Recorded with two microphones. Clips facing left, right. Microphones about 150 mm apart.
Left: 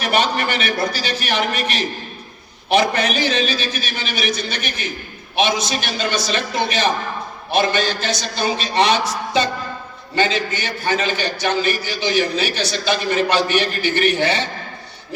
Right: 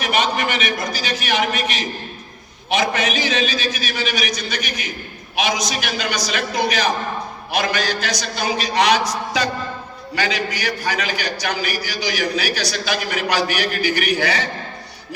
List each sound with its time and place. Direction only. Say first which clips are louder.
0.0 s a man's voice: left 1 dB; 35° left (ahead or behind)